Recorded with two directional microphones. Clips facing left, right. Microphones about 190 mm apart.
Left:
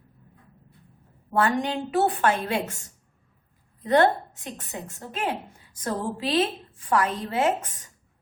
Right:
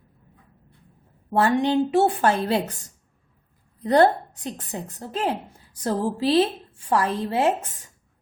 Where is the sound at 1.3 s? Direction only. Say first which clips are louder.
Right 5 dB; 30° right (ahead or behind).